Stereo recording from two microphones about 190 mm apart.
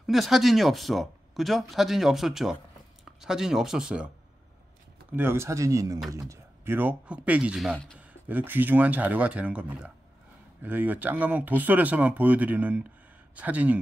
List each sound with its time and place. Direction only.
0.0 s speech: centre (ahead or behind)
5.1 s speech: 10° right (ahead or behind); by 8.0 s 5° left (ahead or behind)
8.1 s speech: 10° right (ahead or behind)